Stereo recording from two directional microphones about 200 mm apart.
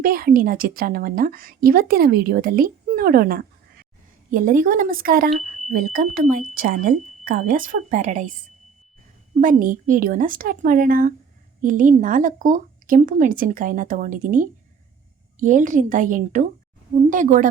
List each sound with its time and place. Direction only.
0.0 s a woman's voice: 45° right (ahead or behind)
9.4 s a woman's voice: 45° right (ahead or behind)